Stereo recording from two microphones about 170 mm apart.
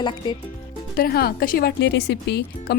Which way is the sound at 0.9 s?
65° left (ahead or behind).